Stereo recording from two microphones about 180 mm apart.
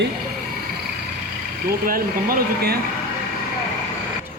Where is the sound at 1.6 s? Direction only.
55° right (ahead or behind).